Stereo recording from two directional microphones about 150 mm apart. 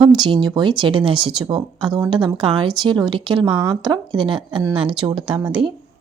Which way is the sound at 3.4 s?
10° right (ahead or behind).